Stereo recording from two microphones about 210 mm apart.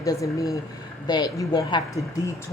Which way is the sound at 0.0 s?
15° left (ahead or behind).